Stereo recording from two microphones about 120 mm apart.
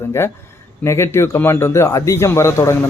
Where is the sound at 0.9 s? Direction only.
20° left (ahead or behind).